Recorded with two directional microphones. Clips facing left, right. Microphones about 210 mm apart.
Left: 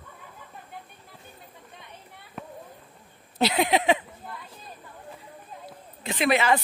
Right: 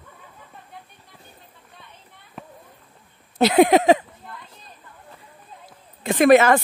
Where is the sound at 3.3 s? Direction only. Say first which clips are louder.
Right 8 dB; 50° right (ahead or behind).